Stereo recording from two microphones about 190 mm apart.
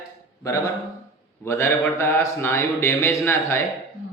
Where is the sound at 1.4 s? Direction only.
15° left (ahead or behind).